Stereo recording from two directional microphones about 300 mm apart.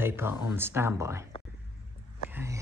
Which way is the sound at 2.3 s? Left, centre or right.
Centre.